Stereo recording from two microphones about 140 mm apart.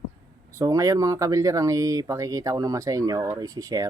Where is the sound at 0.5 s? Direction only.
25° right (ahead or behind).